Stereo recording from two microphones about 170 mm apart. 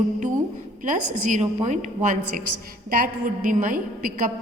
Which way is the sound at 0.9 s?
50° right (ahead or behind).